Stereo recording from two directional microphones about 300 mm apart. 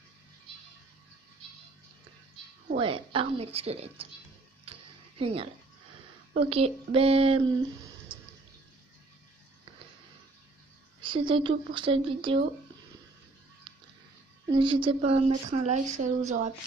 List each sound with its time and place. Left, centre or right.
2.8 s speech: centre
4.6 s a sound: centre
6.3 s speech: centre
11.1 s speech: centre
14.5 s speech: centre